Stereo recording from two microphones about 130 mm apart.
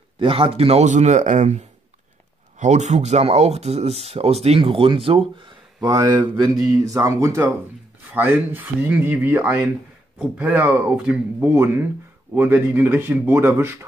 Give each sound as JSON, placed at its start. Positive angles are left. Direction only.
{"t": 0.2, "sound": "a man's voice", "side_deg": -45}
{"t": 5.8, "sound": "speech", "side_deg": -30}